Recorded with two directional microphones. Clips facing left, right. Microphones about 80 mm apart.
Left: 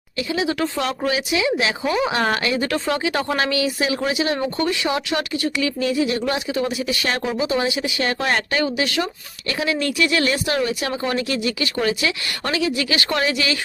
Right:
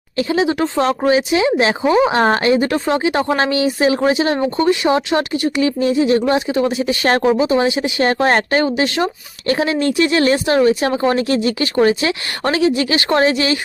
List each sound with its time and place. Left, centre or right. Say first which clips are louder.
0.2 s speech: right 6 dB; right